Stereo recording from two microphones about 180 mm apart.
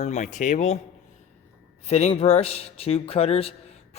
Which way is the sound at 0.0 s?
40° left (ahead or behind).